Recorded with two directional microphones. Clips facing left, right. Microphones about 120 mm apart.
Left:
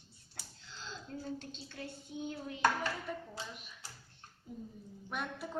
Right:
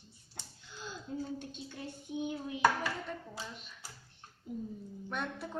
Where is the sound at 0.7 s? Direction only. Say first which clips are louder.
Right 4 dB; 15° right (ahead or behind).